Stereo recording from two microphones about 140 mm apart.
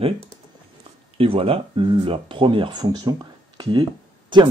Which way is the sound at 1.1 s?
40° right (ahead or behind).